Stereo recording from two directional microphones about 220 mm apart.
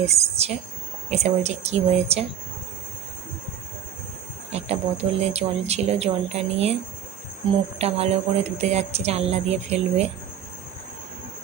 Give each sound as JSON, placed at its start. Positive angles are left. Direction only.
{"t": 0.0, "sound": "speech", "side_deg": -30}
{"t": 4.5, "sound": "speech", "side_deg": -30}
{"t": 7.8, "sound": "speech", "side_deg": -30}